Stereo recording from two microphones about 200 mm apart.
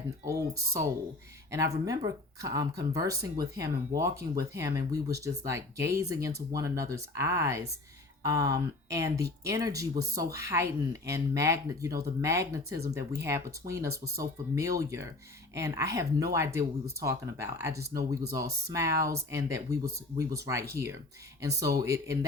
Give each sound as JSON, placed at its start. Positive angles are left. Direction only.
{"t": 0.3, "sound": "speech", "side_deg": -15}